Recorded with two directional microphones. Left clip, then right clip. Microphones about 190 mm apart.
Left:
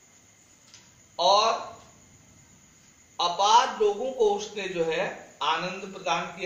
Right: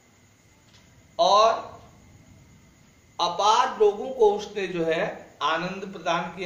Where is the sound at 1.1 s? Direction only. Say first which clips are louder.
Right 2 dB; 20° right (ahead or behind).